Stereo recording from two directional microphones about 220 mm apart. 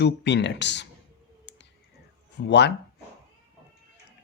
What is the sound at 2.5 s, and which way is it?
Speech, 50° left (ahead or behind).